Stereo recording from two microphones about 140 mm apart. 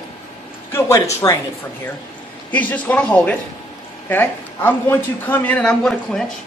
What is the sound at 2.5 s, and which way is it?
Speech, 10° left (ahead or behind).